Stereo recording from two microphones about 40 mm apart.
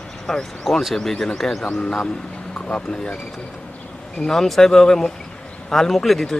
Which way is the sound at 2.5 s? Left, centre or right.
Left.